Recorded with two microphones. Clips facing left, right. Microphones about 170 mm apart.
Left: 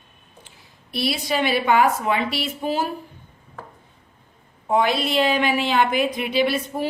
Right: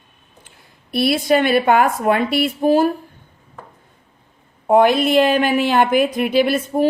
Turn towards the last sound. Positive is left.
turn(degrees=-50)  # may be behind; listen again after turning